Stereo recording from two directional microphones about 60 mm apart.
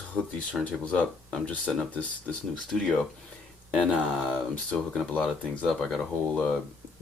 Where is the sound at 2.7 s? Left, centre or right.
Centre.